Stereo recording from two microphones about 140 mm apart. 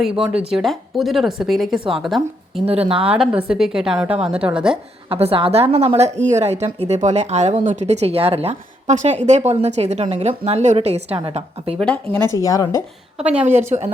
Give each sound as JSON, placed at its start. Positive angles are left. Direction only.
{"t": 0.3, "sound": "a woman's voice", "side_deg": 0}
{"t": 2.6, "sound": "speech", "side_deg": -45}
{"t": 3.1, "sound": "a woman's voice", "side_deg": -10}
{"t": 5.0, "sound": "speech", "side_deg": -45}
{"t": 11.8, "sound": "speech", "side_deg": 5}
{"t": 12.4, "sound": "speech", "side_deg": 25}
{"t": 13.4, "sound": "speech", "side_deg": -55}